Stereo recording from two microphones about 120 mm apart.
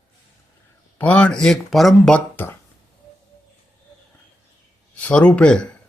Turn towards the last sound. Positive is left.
turn(degrees=10)  # may be behind; listen again after turning